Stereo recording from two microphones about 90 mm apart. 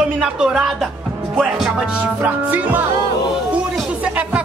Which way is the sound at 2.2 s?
20° right (ahead or behind).